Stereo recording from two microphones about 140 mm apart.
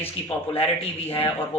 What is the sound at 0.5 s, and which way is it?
Speech, 45° left (ahead or behind).